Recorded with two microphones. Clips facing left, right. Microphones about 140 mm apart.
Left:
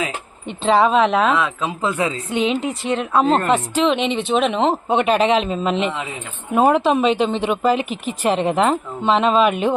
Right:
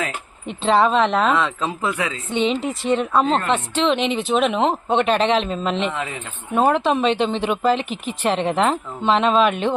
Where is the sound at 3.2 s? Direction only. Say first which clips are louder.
Left 3 dB; 40° left (ahead or behind).